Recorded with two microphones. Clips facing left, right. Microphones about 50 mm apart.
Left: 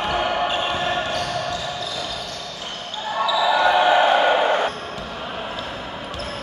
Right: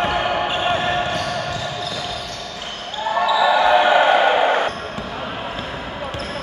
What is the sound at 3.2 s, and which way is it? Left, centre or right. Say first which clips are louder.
Basketball bounce: right 2 dB; right.